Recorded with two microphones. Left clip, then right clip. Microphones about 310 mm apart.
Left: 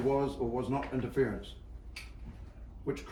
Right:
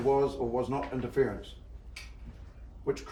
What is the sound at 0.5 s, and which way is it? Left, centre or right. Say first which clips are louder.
Speech: right 3 dB; centre.